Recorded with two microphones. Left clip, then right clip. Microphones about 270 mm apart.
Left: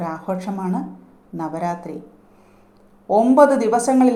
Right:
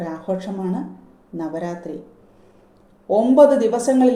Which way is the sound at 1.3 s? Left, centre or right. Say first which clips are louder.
Left 2 dB; left.